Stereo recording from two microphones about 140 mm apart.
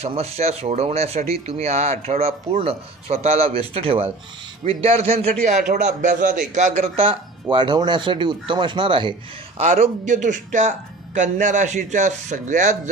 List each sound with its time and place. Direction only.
0.0 s speech: 45° right (ahead or behind)
7.0 s speech: 35° right (ahead or behind)
9.6 s speech: 55° right (ahead or behind)